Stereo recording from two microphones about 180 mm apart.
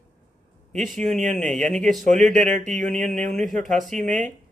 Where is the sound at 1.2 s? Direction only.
45° right (ahead or behind).